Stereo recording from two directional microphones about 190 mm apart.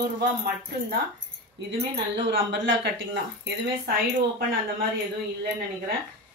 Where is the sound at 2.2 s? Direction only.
70° right (ahead or behind).